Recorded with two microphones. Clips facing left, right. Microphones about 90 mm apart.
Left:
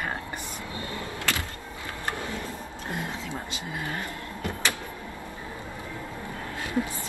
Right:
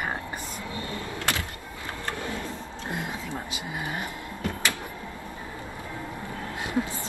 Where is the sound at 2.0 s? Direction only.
20° left (ahead or behind).